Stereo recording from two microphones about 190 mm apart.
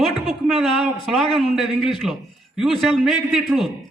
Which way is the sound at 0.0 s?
Centre (ahead or behind).